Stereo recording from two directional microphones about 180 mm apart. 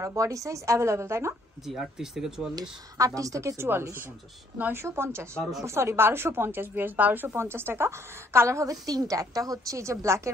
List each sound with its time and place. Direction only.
0.0 s a woman's voice: 15° right (ahead or behind)
1.7 s speech: centre (ahead or behind)
3.0 s a woman's voice: 20° right (ahead or behind)